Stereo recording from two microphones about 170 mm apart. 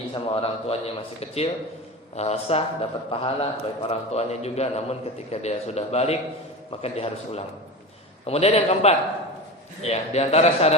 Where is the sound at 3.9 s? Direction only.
40° left (ahead or behind).